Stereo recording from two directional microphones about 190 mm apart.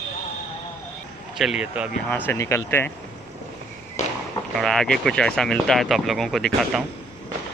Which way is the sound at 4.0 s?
35° left (ahead or behind).